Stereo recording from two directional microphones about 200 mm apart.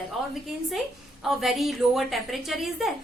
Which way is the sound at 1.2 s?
Centre (ahead or behind).